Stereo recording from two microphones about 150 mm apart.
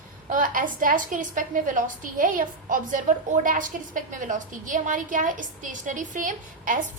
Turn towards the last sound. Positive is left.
turn(degrees=-60)  # may be behind; listen again after turning